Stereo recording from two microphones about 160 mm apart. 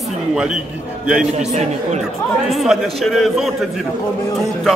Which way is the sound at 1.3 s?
45° right (ahead or behind).